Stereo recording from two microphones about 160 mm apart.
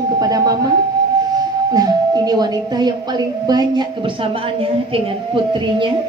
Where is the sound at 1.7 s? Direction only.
25° right (ahead or behind).